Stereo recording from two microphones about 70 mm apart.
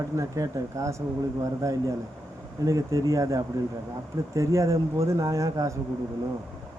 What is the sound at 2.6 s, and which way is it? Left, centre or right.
Speech, right.